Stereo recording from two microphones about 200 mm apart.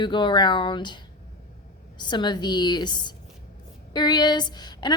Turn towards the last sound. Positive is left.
turn(degrees=20)  # may be behind; listen again after turning